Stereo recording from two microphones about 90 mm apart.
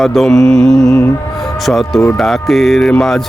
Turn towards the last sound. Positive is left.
turn(degrees=5)  # may be behind; listen again after turning